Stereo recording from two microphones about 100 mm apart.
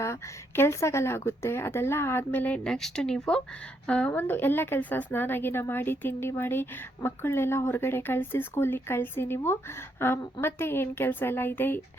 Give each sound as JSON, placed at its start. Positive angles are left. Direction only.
{"t": 0.0, "sound": "a woman's voice", "side_deg": 25}
{"t": 2.6, "sound": "a woman's voice", "side_deg": 5}